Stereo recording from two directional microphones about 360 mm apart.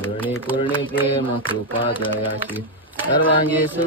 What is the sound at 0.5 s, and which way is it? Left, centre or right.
Mantra, centre.